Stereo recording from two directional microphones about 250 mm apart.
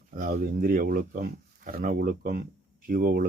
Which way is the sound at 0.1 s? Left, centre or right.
Right.